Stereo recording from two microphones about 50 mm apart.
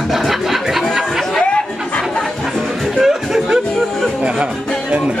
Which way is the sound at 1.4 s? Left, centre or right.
Centre.